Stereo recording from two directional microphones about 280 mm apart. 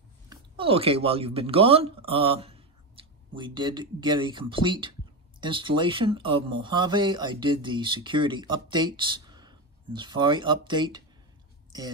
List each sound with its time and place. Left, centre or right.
0.3 s speech: centre